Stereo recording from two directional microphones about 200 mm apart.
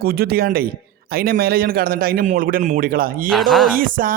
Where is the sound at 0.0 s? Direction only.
50° right (ahead or behind).